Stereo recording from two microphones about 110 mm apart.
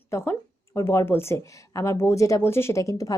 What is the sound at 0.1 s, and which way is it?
Speech, 25° left (ahead or behind).